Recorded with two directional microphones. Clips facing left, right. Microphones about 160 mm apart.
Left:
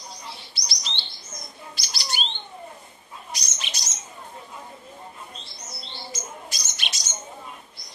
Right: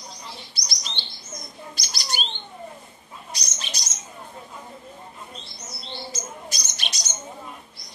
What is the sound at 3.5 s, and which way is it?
Bird, 40° right (ahead or behind).